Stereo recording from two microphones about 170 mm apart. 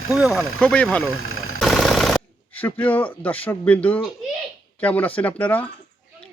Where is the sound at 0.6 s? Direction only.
5° left (ahead or behind).